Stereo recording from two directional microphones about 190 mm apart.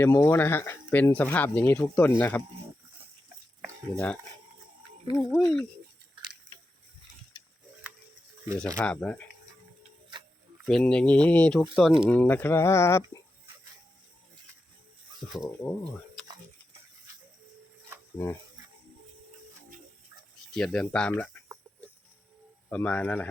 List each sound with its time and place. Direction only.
0.0 s speech: 15° left (ahead or behind)
3.9 s speech: 5° left (ahead or behind)
5.1 s speech: 30° right (ahead or behind)
5.4 s speech: centre (ahead or behind)
8.5 s speech: 5° left (ahead or behind)
10.7 s speech: centre (ahead or behind)
15.2 s speech: 15° left (ahead or behind)
20.5 s speech: 5° left (ahead or behind)
22.7 s speech: 5° left (ahead or behind)